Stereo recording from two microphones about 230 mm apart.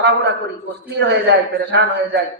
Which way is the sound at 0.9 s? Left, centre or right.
Right.